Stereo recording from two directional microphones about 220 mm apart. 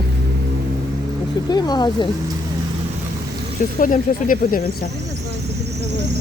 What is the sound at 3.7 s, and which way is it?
Speech, 40° left (ahead or behind).